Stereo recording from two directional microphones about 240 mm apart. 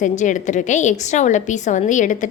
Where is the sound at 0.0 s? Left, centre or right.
Left.